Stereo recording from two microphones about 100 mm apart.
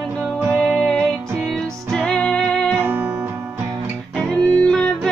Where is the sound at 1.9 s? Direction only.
10° left (ahead or behind).